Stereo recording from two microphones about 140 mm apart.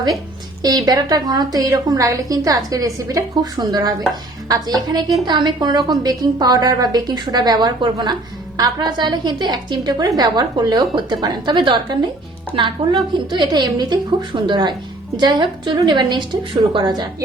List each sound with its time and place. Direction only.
0.6 s a woman's voice: 30° right (ahead or behind)